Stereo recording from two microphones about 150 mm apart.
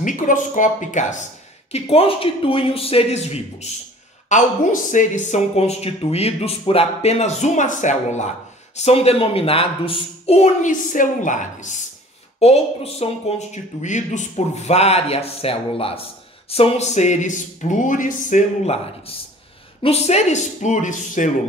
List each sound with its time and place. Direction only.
0.0 s speech: 60° left (ahead or behind)
1.7 s speech: 40° left (ahead or behind)
4.3 s speech: 55° left (ahead or behind)
12.4 s speech: 45° left (ahead or behind); by 18.4 s 60° left (ahead or behind)
18.7 s speech: 40° left (ahead or behind); by 21.3 s 55° left (ahead or behind)